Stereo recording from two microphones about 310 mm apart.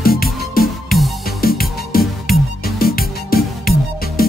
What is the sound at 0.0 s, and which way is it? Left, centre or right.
Music, left.